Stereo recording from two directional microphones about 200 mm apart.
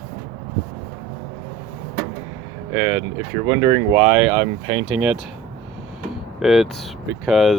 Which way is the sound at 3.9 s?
5° right (ahead or behind).